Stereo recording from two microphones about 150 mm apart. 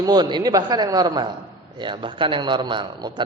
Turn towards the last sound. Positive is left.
turn(degrees=-30)  # may be behind; listen again after turning